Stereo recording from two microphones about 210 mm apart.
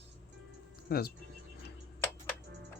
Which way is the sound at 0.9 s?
45° left (ahead or behind).